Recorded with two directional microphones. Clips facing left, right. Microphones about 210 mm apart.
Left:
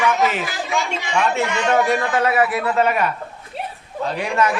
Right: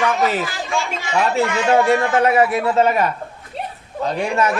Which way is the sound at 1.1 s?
30° right (ahead or behind).